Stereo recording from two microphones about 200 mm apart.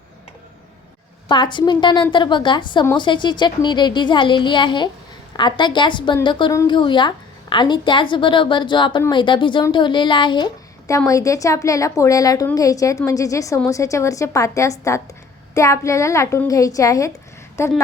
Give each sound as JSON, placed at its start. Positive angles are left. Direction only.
{"t": 1.3, "sound": "a woman's voice", "side_deg": 25}